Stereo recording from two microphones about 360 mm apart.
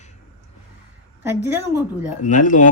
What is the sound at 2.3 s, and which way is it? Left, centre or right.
Speech, left.